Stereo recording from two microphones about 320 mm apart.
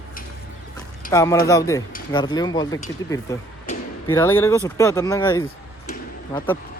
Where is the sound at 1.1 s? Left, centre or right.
Centre.